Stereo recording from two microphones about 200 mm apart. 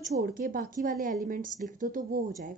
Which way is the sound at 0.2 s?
45° right (ahead or behind).